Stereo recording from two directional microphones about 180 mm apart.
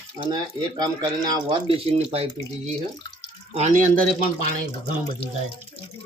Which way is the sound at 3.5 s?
40° right (ahead or behind).